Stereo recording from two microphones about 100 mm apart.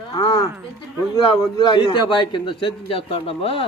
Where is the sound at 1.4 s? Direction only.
45° left (ahead or behind).